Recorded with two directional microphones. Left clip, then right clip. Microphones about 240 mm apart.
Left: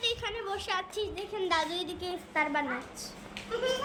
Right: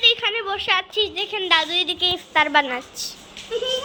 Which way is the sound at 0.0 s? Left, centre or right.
Centre.